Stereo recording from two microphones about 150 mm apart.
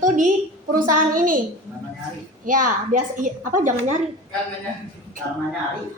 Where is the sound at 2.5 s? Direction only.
60° right (ahead or behind).